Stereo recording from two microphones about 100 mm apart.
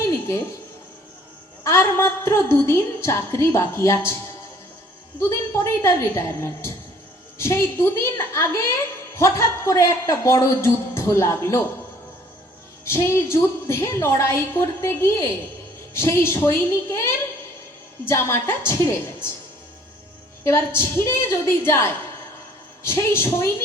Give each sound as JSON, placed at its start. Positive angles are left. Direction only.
{"t": 0.1, "sound": "music", "side_deg": 25}
{"t": 1.6, "sound": "a woman's voice", "side_deg": 25}
{"t": 5.2, "sound": "a woman's voice", "side_deg": 25}
{"t": 12.8, "sound": "a woman's voice", "side_deg": 25}
{"t": 20.4, "sound": "a woman's voice", "side_deg": 25}